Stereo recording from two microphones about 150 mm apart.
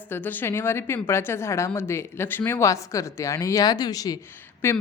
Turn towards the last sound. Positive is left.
turn(degrees=15)  # may be behind; listen again after turning